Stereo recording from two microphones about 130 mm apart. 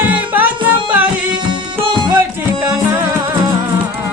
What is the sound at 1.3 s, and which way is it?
Music, 35° right (ahead or behind).